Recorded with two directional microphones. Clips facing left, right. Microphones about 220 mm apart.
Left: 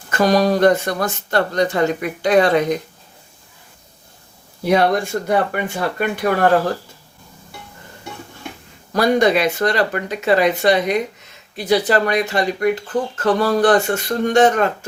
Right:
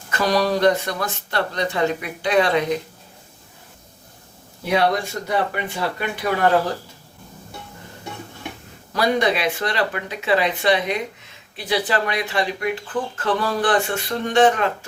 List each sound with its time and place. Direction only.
0.1 s speech: 45° left (ahead or behind)
4.6 s speech: 40° left (ahead or behind)
8.9 s speech: 45° left (ahead or behind)